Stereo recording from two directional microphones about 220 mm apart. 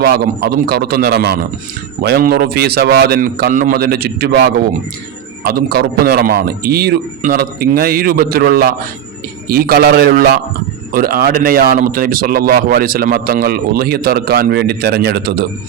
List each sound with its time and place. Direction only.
0.0 s speech: 45° right (ahead or behind)